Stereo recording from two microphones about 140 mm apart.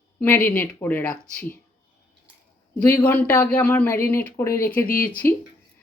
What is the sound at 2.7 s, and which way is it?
Speech, 10° left (ahead or behind).